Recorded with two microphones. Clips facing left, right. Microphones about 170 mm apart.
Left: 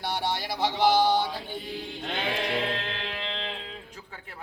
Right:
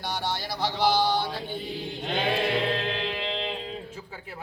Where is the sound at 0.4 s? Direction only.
20° left (ahead or behind).